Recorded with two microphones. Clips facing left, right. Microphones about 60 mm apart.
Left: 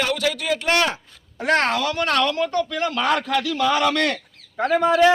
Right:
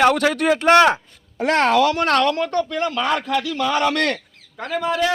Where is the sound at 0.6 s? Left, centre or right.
Right.